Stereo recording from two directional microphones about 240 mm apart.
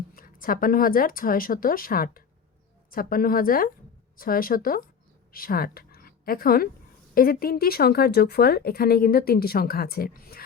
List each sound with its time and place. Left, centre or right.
0.2 s a woman's voice: left